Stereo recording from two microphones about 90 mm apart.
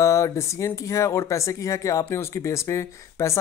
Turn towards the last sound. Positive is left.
turn(degrees=35)  # may be behind; listen again after turning